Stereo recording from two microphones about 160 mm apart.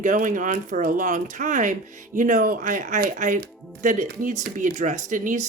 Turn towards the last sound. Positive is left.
turn(degrees=-50)  # may be behind; listen again after turning